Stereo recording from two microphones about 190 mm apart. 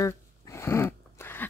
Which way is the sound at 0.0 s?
15° left (ahead or behind).